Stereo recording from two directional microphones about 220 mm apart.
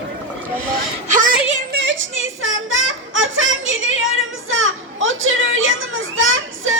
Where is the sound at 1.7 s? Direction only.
55° right (ahead or behind).